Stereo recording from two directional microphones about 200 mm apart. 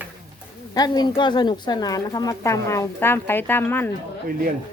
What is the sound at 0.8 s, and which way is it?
A woman's voice, 20° left (ahead or behind).